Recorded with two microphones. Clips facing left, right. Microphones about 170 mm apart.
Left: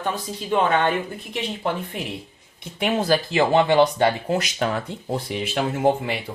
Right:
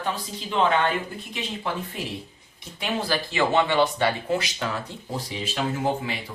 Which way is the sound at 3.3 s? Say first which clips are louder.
Left 4 dB; 40° left (ahead or behind).